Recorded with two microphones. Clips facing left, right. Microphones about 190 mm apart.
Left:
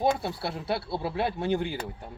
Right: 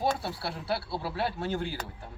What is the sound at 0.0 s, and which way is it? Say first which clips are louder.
Speech: left 4 dB; 20° left (ahead or behind).